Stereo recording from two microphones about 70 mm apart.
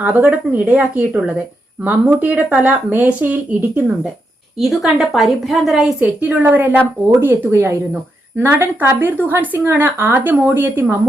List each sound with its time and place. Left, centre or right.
0.0 s a woman's voice: right
4.5 s a woman's voice: centre
6.0 s a woman's voice: right
7.5 s a woman's voice: right